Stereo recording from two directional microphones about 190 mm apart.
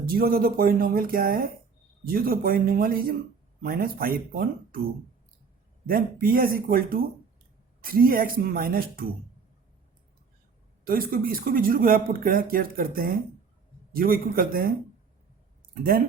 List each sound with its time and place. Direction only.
0.0 s speech: 50° right (ahead or behind)
5.8 s speech: 50° right (ahead or behind)
10.8 s speech: 50° right (ahead or behind)
15.7 s speech: 50° right (ahead or behind)